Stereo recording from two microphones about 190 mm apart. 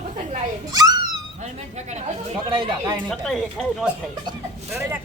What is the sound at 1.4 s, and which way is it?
Speech, 35° right (ahead or behind).